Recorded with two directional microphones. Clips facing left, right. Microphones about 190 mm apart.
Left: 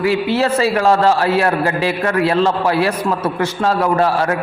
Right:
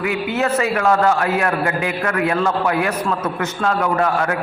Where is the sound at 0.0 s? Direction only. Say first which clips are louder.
Left 4 dB; 30° left (ahead or behind).